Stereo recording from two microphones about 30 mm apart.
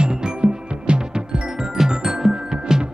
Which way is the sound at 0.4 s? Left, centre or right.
Right.